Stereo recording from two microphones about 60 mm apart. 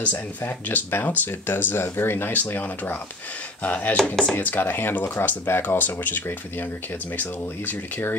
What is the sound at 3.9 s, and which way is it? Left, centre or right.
Speech, centre.